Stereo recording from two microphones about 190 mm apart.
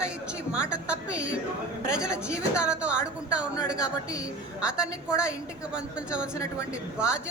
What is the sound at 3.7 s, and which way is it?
Speech, 20° left (ahead or behind).